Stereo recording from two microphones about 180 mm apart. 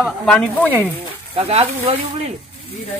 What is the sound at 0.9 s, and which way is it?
Speech, 30° right (ahead or behind).